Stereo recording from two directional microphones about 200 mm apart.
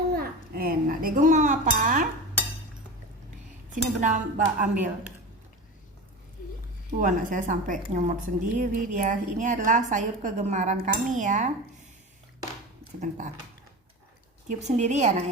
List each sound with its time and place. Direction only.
0.1 s dishes: 50° right (ahead or behind)
3.7 s a woman's voice: 40° right (ahead or behind)
7.0 s a woman's voice: 40° right (ahead or behind)
13.0 s a woman's voice: 40° right (ahead or behind)
14.8 s a woman's voice: 35° right (ahead or behind)